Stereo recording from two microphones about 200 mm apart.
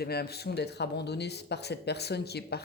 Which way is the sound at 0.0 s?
55° left (ahead or behind).